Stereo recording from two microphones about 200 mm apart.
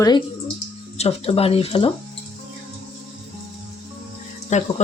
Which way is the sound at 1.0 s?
30° left (ahead or behind).